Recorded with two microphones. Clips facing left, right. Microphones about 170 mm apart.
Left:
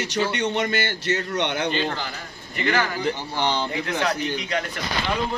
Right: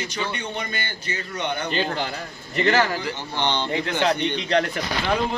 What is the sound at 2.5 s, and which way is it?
Speech, 35° right (ahead or behind).